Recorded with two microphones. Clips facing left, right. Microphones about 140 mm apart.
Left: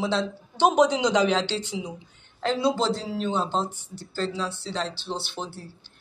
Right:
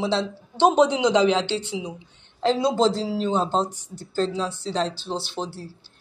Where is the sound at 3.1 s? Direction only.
30° right (ahead or behind).